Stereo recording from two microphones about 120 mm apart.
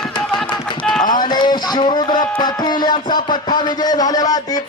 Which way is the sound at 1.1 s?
35° left (ahead or behind).